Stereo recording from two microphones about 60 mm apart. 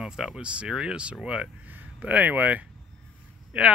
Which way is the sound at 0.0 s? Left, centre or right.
Centre.